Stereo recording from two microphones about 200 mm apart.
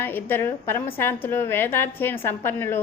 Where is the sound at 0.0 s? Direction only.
10° left (ahead or behind).